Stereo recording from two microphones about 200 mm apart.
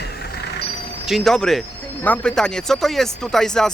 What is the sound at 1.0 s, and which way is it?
Speech, centre (ahead or behind).